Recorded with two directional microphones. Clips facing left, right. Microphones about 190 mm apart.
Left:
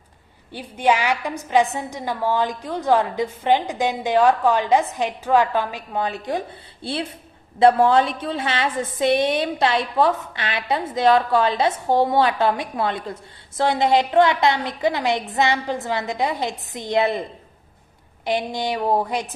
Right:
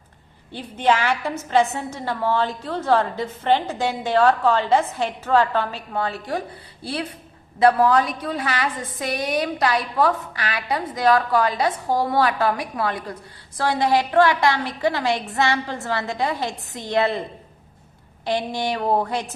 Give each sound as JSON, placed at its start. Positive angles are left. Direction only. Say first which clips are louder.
{"t": 0.5, "sound": "a woman's voice", "louder": "even", "side_deg": 15}
{"t": 18.3, "sound": "a woman's voice", "louder": "even", "side_deg": 15}